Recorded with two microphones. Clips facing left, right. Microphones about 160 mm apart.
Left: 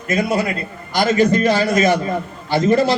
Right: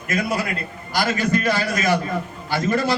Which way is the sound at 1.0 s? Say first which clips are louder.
Left 6 dB; 25° left (ahead or behind).